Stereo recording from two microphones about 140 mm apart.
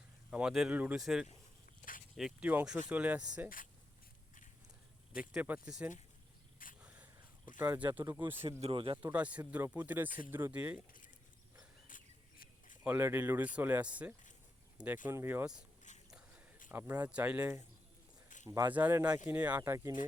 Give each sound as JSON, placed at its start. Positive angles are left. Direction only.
{"t": 0.3, "sound": "speech", "side_deg": -5}
{"t": 5.3, "sound": "speech", "side_deg": -10}
{"t": 6.8, "sound": "dog", "side_deg": -10}
{"t": 7.6, "sound": "speech", "side_deg": -15}
{"t": 8.4, "sound": "speech", "side_deg": -40}
{"t": 9.1, "sound": "speech", "side_deg": -10}
{"t": 10.1, "sound": "speech", "side_deg": 75}
{"t": 10.3, "sound": "speech", "side_deg": -10}
{"t": 11.9, "sound": "a sound", "side_deg": 70}
{"t": 12.8, "sound": "speech", "side_deg": -15}
{"t": 15.9, "sound": "a sound", "side_deg": 60}
{"t": 16.6, "sound": "speech", "side_deg": -15}